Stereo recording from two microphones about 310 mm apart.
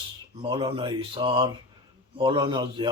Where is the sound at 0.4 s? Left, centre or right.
Centre.